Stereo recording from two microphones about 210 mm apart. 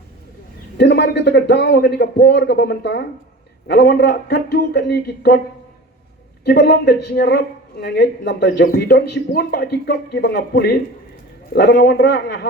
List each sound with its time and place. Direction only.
0.8 s speech: 55° left (ahead or behind)
6.4 s speech: 50° left (ahead or behind)